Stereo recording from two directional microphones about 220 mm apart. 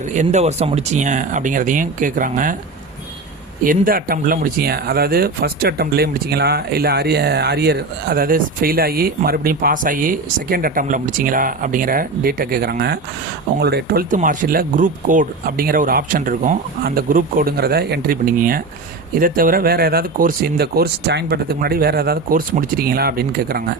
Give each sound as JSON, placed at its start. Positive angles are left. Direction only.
{"t": 0.1, "sound": "speech", "side_deg": -35}
{"t": 3.6, "sound": "speech", "side_deg": -40}